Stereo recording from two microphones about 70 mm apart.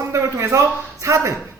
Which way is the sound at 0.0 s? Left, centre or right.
Right.